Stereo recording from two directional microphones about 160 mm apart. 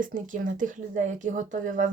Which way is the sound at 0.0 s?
55° right (ahead or behind).